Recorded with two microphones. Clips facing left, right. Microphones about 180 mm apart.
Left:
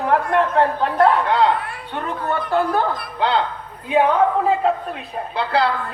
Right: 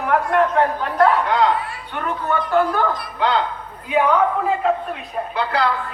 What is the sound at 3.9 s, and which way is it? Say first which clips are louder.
Speech: left 1 dB; 30° left (ahead or behind).